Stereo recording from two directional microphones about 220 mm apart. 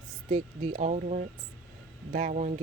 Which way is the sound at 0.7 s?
30° right (ahead or behind).